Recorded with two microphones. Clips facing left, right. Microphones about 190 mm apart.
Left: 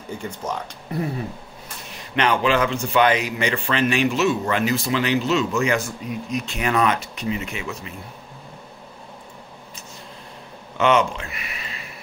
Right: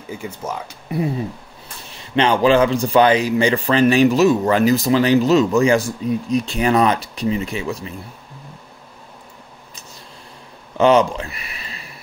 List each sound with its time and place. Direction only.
0.2 s speech: 5° right (ahead or behind)
2.0 s a man's voice: 30° right (ahead or behind)
10.8 s speech: 35° right (ahead or behind)